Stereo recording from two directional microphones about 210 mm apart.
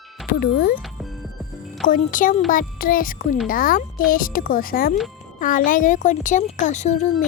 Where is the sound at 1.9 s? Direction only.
40° left (ahead or behind).